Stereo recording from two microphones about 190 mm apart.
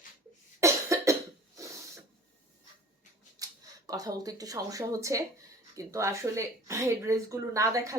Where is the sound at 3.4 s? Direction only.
20° right (ahead or behind).